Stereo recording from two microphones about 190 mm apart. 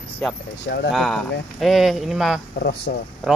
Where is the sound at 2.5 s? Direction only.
60° left (ahead or behind).